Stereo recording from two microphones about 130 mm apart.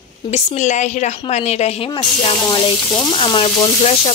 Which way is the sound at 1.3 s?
55° left (ahead or behind).